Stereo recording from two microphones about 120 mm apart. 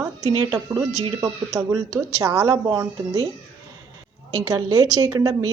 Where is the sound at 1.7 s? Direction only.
30° right (ahead or behind).